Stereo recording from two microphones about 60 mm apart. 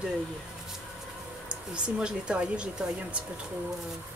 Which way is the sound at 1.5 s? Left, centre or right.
Centre.